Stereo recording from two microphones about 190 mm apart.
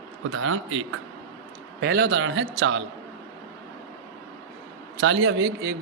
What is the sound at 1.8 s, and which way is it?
A man's voice, 60° right (ahead or behind).